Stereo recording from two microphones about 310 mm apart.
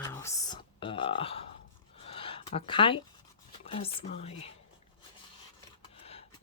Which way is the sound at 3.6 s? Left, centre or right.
Centre.